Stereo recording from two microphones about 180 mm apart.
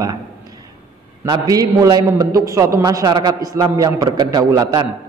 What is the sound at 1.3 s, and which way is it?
A man's voice, 20° right (ahead or behind).